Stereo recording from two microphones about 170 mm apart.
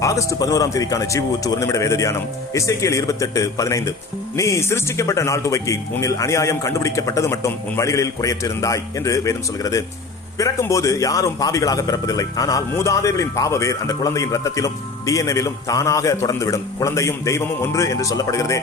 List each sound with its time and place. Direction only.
0.0 s a man's voice: 20° left (ahead or behind)